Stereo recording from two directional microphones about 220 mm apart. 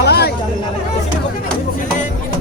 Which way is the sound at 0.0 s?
45° left (ahead or behind).